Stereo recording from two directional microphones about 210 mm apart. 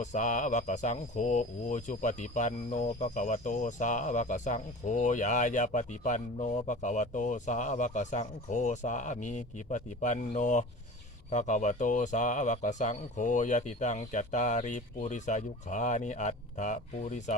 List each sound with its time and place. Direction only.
0.0 s speech: 35° left (ahead or behind)